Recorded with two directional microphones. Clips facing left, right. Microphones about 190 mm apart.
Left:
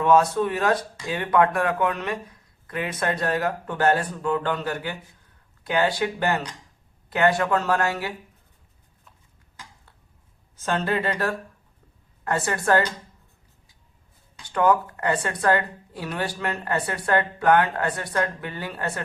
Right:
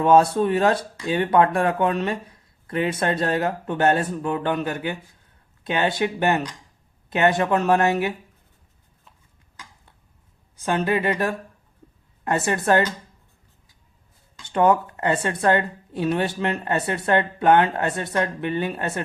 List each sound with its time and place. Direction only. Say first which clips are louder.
0.0 s speech: right 3 dB; 30° right (ahead or behind)
10.6 s speech: right 3 dB; 15° right (ahead or behind)
14.4 s speech: right 2 dB; 25° right (ahead or behind)